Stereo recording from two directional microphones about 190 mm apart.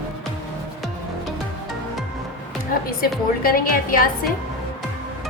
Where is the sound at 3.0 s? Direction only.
50° left (ahead or behind).